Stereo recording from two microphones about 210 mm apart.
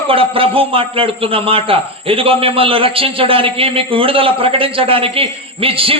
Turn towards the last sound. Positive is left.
turn(degrees=-25)  # may be behind; listen again after turning